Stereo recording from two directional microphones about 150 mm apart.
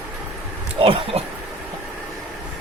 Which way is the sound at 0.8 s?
40° right (ahead or behind).